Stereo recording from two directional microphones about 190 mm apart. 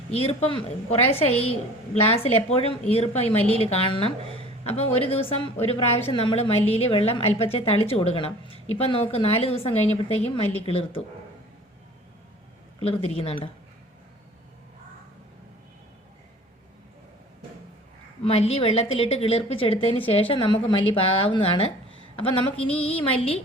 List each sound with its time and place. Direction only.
0.1 s a woman's voice: 35° left (ahead or behind)
12.8 s a woman's voice: 30° left (ahead or behind)
18.3 s a woman's voice: 35° left (ahead or behind)
22.5 s music: 5° left (ahead or behind)
23.0 s a woman's voice: 30° left (ahead or behind)